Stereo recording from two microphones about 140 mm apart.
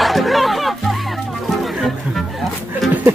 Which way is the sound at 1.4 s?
Centre (ahead or behind).